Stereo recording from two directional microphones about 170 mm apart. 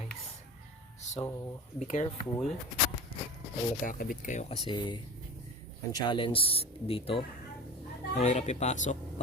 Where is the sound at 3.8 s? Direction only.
55° left (ahead or behind).